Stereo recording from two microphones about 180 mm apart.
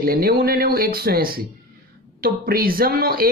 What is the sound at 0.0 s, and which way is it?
Speech, 55° right (ahead or behind).